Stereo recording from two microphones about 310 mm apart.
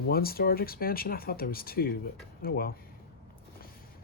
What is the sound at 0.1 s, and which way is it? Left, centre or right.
Speech, left.